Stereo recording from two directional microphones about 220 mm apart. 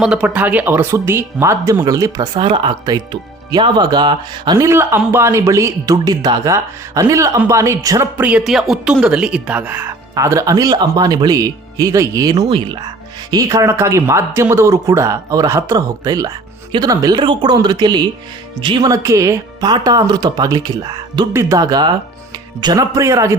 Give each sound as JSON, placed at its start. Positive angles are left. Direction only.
{"t": 0.0, "sound": "speech", "side_deg": -5}